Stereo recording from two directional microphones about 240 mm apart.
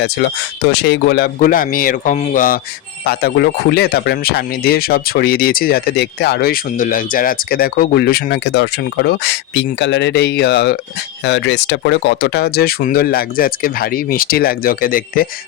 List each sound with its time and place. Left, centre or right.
0.0 s speech: left